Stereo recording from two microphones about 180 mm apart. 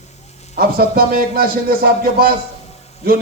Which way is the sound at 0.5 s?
55° right (ahead or behind).